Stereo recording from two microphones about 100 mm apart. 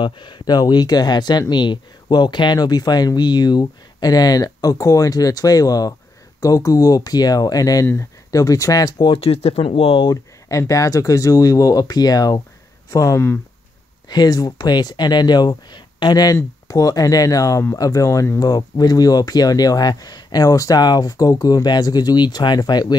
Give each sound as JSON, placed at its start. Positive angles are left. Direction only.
{"t": 0.0, "sound": "speech", "side_deg": 50}
{"t": 7.8, "sound": "speech", "side_deg": 20}
{"t": 8.3, "sound": "speech", "side_deg": 35}
{"t": 8.9, "sound": "speech", "side_deg": 55}
{"t": 10.6, "sound": "speech", "side_deg": 35}